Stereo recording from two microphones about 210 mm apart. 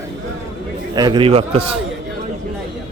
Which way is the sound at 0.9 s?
20° right (ahead or behind).